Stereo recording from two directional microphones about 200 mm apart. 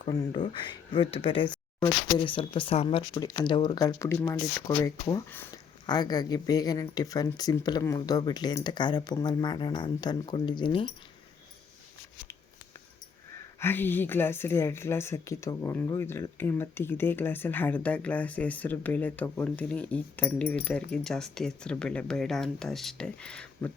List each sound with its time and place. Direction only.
0.0 s speech: 25° left (ahead or behind)
13.6 s speech: 10° left (ahead or behind)